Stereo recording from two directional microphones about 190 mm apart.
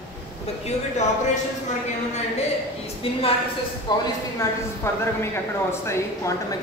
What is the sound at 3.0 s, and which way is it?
A woman's voice, 30° left (ahead or behind).